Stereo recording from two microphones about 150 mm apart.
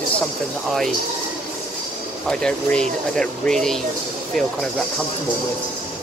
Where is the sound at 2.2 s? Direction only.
5° left (ahead or behind).